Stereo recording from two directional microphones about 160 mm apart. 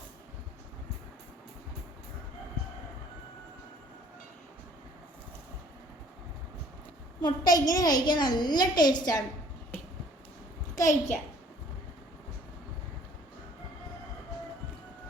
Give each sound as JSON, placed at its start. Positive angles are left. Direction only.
{"t": 7.2, "sound": "a woman's voice", "side_deg": 25}
{"t": 10.8, "sound": "a child's voice", "side_deg": 20}